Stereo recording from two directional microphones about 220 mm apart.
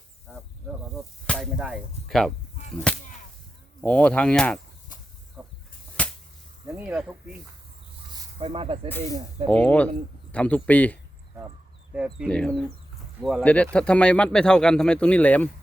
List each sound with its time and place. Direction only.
0.3 s snake: centre (ahead or behind)
1.3 s speech: centre (ahead or behind)
2.9 s whip: 5° left (ahead or behind)
3.8 s speech: 5° left (ahead or behind)
5.4 s a sound: centre (ahead or behind)
6.0 s whip: 5° left (ahead or behind)
6.7 s speech: 5° right (ahead or behind)
8.1 s snake: 20° right (ahead or behind)
9.5 s speech: 5° left (ahead or behind)